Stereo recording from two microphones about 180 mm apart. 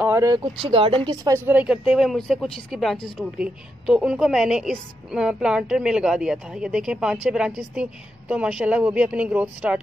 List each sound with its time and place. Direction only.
0.0 s speech: 15° right (ahead or behind)